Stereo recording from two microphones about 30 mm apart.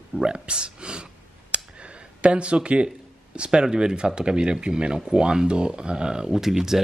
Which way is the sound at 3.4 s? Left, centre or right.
Right.